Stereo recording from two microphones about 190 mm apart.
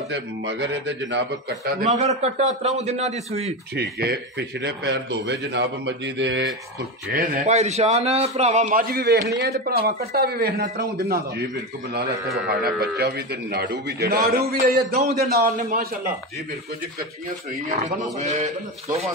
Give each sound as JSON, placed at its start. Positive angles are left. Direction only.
{"t": 0.1, "sound": "a man's voice", "side_deg": -70}
{"t": 2.0, "sound": "a man's voice", "side_deg": -35}
{"t": 3.7, "sound": "a man's voice", "side_deg": -55}
{"t": 7.2, "sound": "a man's voice", "side_deg": -40}
{"t": 18.2, "sound": "a man's voice", "side_deg": -40}